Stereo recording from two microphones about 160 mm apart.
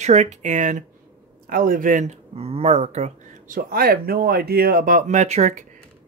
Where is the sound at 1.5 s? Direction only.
60° right (ahead or behind).